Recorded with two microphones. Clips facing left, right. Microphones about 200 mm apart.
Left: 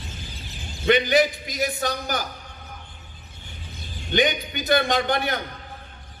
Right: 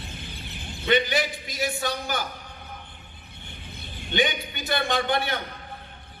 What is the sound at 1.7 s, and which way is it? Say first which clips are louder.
Speech: left 2 dB; 40° left (ahead or behind).